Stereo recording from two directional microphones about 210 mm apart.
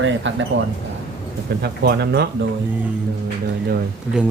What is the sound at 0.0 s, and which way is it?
Speech, 60° right (ahead or behind).